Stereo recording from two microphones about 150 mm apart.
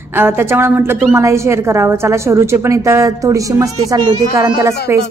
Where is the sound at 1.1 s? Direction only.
20° right (ahead or behind).